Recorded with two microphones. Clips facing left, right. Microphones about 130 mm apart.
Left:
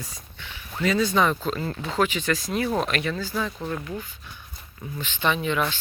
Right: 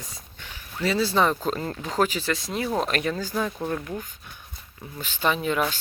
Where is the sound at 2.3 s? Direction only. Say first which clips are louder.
Left 2 dB; 25° right (ahead or behind).